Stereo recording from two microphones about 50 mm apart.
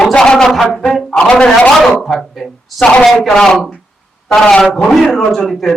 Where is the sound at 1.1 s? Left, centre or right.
Left.